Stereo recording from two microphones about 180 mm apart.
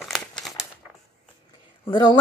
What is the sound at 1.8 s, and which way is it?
Speech, 25° left (ahead or behind).